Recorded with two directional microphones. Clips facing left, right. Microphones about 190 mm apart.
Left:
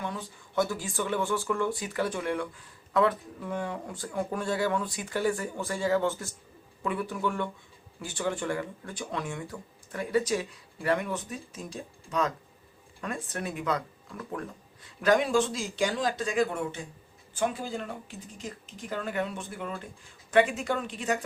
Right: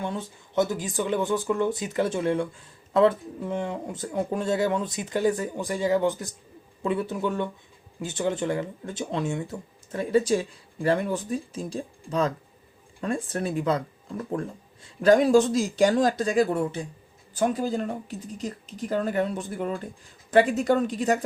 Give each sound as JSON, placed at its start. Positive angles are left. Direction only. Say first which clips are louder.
{"t": 0.0, "sound": "speech", "louder": "right 5 dB", "side_deg": -25}